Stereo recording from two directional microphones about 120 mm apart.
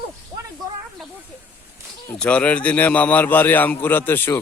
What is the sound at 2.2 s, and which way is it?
Speech, 10° left (ahead or behind).